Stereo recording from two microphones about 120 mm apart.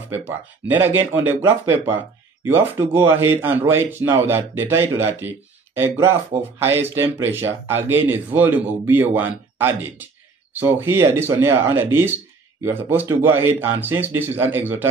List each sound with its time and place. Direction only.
0.1 s speech: 15° right (ahead or behind)